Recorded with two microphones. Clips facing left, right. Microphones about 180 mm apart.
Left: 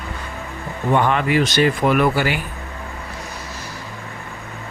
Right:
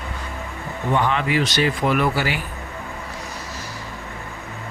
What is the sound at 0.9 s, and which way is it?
Speech, 50° left (ahead or behind).